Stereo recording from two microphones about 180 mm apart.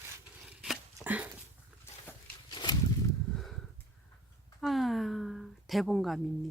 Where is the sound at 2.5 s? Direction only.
25° left (ahead or behind).